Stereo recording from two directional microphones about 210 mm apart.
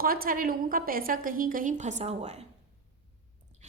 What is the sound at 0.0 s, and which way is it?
A woman's voice, 40° right (ahead or behind).